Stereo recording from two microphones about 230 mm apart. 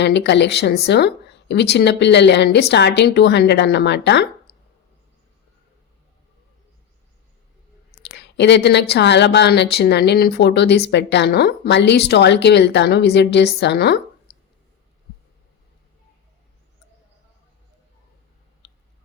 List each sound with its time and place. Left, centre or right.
0.0 s speech: left
7.9 s speech: left